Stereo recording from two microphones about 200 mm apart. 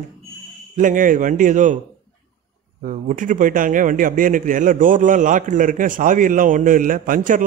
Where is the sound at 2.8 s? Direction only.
40° right (ahead or behind).